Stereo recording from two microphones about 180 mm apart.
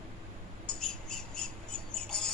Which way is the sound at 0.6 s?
5° left (ahead or behind).